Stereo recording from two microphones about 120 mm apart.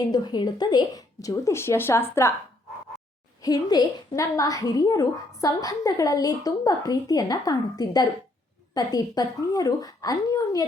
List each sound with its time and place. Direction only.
0.0 s speech: 35° left (ahead or behind)
3.4 s a woman's voice: 30° left (ahead or behind)